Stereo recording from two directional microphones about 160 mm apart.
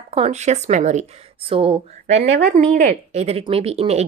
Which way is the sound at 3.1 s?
40° right (ahead or behind).